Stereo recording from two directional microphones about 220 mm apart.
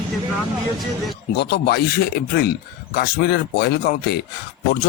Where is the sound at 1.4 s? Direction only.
50° left (ahead or behind).